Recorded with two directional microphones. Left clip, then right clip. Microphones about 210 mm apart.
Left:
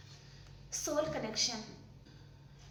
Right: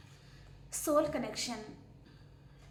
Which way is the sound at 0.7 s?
35° right (ahead or behind).